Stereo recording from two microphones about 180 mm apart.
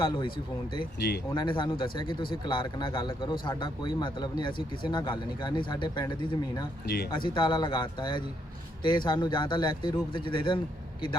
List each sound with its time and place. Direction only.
0.0 s a man's voice: 25° left (ahead or behind)
0.9 s speech: 65° left (ahead or behind)
1.3 s a man's voice: 25° left (ahead or behind)
6.8 s speech: 65° left (ahead or behind)
7.1 s a man's voice: 25° left (ahead or behind)